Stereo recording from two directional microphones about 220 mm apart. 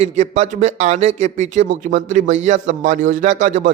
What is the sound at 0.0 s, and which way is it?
A man's voice, 30° right (ahead or behind).